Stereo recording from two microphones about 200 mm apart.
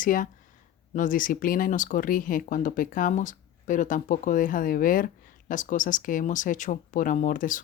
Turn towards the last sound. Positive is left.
turn(degrees=40)  # may be behind; listen again after turning